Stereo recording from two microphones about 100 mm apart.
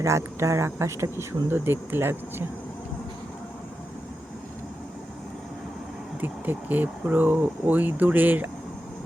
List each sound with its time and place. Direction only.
0.0 s speech: 30° right (ahead or behind)
6.2 s speech: 20° right (ahead or behind)